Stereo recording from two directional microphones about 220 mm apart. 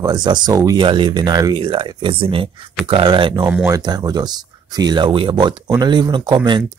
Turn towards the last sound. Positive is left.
turn(degrees=-20)  # may be behind; listen again after turning